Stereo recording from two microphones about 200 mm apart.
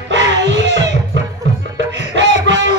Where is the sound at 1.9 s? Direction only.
65° right (ahead or behind).